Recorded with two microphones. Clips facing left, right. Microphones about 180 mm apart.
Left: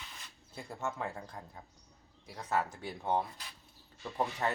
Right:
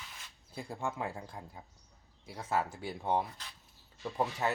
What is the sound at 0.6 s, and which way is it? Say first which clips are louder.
Speech: right 1 dB; 15° right (ahead or behind).